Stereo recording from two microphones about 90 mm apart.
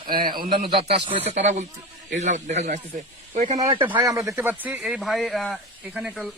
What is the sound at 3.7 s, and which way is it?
Speech, 70° right (ahead or behind).